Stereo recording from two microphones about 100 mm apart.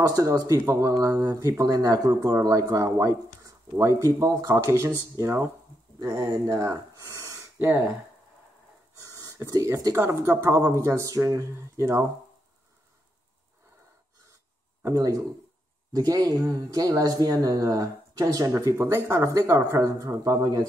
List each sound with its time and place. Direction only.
0.0 s speech: 35° right (ahead or behind)
5.9 s speech: 35° right (ahead or behind)
7.5 s speech: 15° right (ahead or behind)
8.9 s a sound: 35° right (ahead or behind)
9.9 s speech: 25° right (ahead or behind)
14.9 s speech: 30° right (ahead or behind)
18.5 s speech: 25° right (ahead or behind)